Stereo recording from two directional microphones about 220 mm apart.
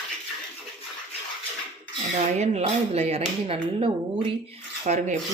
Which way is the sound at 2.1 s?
30° right (ahead or behind).